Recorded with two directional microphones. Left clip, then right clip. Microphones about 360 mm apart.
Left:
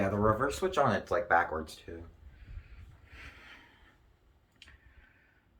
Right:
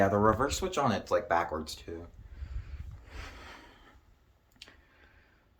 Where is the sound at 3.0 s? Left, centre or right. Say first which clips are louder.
Right 3 dB; centre.